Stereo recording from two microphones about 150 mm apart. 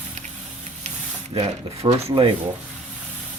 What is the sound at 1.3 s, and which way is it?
Speech, 40° right (ahead or behind).